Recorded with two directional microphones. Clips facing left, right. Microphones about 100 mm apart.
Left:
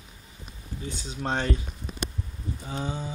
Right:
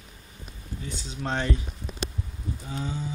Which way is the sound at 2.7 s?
25° left (ahead or behind).